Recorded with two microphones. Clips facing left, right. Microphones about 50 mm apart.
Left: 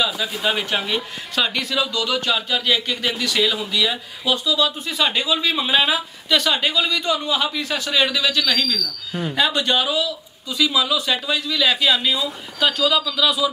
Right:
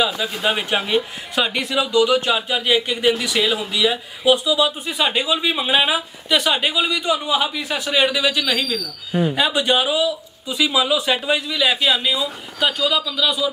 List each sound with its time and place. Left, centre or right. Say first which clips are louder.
0.0 s speech: right 2 dB; centre